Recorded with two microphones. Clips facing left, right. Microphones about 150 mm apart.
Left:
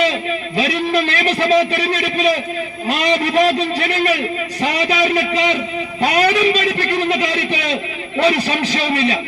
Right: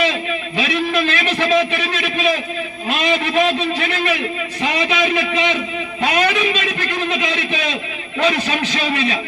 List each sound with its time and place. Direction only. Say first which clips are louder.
0.0 s a man's voice: left 2 dB; 35° left (ahead or behind)
6.0 s a sound: left 3 dB; 35° left (ahead or behind)
8.2 s a man's voice: left 2 dB; 35° left (ahead or behind)